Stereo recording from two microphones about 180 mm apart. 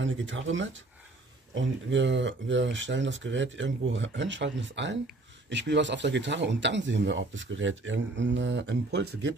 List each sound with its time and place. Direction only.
0.0 s speech: 90° right; by 9.3 s 75° right (ahead or behind)